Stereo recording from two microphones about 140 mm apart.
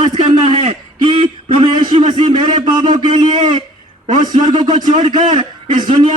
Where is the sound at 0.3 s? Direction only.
45° right (ahead or behind).